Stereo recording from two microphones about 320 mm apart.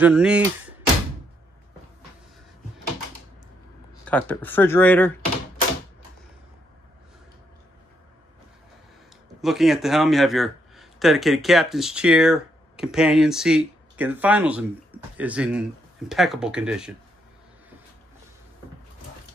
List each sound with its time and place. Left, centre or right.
0.0 s speech: centre
4.0 s speech: centre
9.4 s speech: centre